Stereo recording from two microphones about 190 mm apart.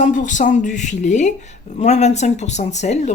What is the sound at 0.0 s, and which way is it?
Speech, 40° left (ahead or behind).